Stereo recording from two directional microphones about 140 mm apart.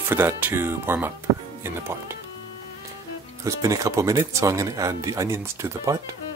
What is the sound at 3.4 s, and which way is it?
Speech, 25° right (ahead or behind).